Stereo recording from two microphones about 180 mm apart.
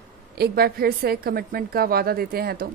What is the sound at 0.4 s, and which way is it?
A woman's voice, 60° right (ahead or behind).